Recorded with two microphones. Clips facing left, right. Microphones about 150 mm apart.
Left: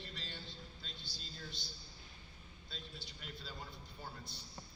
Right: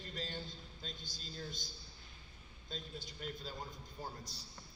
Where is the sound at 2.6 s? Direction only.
45° right (ahead or behind).